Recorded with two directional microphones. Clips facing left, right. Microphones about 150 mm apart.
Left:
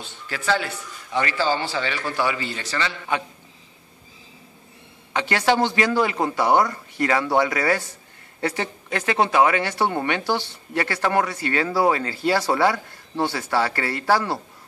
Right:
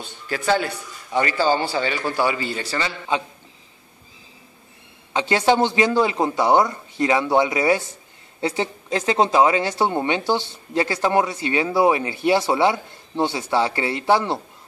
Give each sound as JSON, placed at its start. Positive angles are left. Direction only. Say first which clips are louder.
{"t": 0.6, "sound": "a man's voice", "louder": "right 3 dB", "side_deg": -40}
{"t": 1.5, "sound": "a man's voice", "louder": "right 3 dB", "side_deg": -15}
{"t": 2.2, "sound": "a man's voice", "louder": "right 3 dB", "side_deg": -40}
{"t": 5.1, "sound": "speech", "louder": "right 2 dB", "side_deg": -20}